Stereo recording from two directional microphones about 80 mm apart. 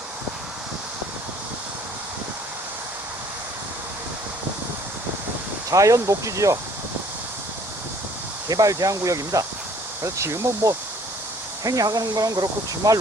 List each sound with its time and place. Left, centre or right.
5.7 s speech: right
8.4 s speech: right